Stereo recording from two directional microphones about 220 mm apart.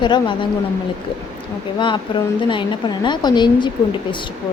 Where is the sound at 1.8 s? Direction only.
20° left (ahead or behind).